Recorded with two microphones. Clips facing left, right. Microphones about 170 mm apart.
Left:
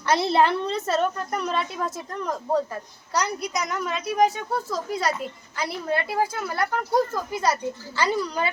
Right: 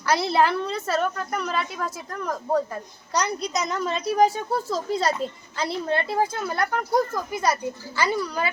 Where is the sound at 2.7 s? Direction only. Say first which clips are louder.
Right 1 dB; 20° right (ahead or behind).